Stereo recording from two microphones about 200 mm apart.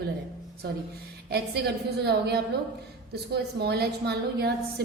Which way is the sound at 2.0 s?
55° right (ahead or behind).